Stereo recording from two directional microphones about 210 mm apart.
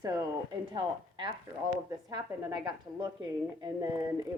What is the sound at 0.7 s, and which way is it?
A woman's voice, 20° right (ahead or behind).